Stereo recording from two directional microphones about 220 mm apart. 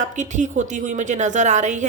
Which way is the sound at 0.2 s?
35° right (ahead or behind).